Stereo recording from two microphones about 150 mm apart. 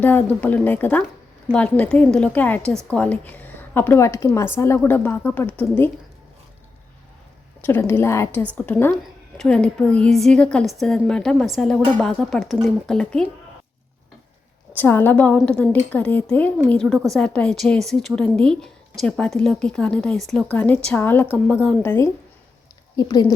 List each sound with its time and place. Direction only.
0.0 s a woman's voice: 10° left (ahead or behind)
7.6 s a woman's voice: 15° left (ahead or behind)
14.8 s a woman's voice: 15° left (ahead or behind)
23.0 s speech: 25° left (ahead or behind)